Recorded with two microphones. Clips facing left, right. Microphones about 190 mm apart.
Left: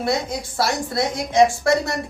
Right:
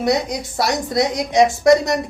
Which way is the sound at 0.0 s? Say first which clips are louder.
Right 4 dB; 20° right (ahead or behind).